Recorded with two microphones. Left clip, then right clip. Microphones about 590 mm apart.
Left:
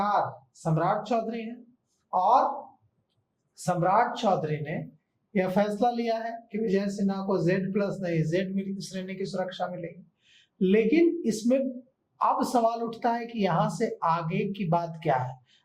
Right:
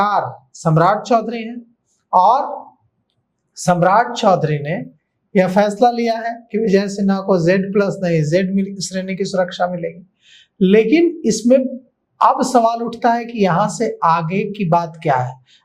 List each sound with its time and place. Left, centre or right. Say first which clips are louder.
0.6 s a man's voice: right 12 dB; right
3.7 s speech: right 10 dB; right